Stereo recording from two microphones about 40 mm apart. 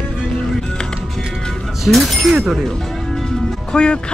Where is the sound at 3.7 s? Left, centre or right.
Left.